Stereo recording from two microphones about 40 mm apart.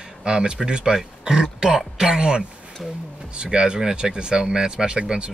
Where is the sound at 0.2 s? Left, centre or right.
Right.